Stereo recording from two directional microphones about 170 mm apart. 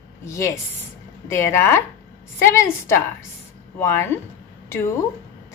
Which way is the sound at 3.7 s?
10° left (ahead or behind).